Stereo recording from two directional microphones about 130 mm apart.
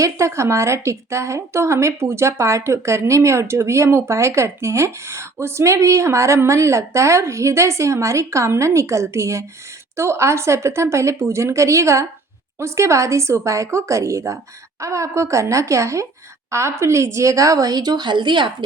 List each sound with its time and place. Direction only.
0.0 s a woman's voice: 20° right (ahead or behind)